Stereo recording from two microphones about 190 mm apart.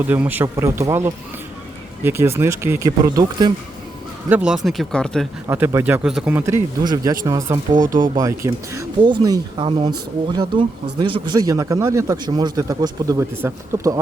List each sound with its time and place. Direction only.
0.0 s speech: 10° right (ahead or behind)
4.3 s speech: 5° right (ahead or behind)
5.5 s speech: 10° right (ahead or behind)